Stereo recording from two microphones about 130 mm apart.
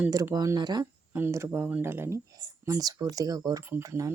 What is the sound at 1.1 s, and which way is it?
Speech, 15° right (ahead or behind).